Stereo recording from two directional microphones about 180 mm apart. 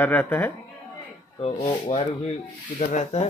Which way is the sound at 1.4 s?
35° left (ahead or behind).